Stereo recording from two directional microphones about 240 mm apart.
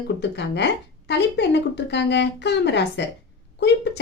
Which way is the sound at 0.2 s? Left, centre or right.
Left.